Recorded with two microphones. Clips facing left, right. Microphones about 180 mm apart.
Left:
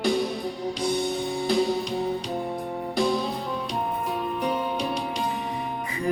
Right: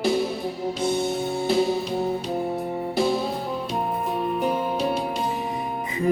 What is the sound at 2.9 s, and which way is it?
Music, 5° right (ahead or behind).